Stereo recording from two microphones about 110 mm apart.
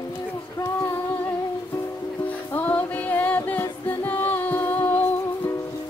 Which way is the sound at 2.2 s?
15° left (ahead or behind).